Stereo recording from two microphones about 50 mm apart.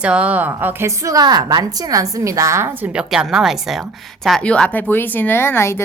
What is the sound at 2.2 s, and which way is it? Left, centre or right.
Speech, right.